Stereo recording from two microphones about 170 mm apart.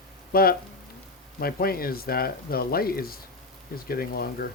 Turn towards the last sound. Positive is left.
turn(degrees=60)  # may be behind; listen again after turning